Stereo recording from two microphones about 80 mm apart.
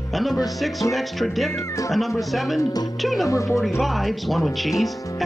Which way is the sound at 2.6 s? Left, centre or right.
Left.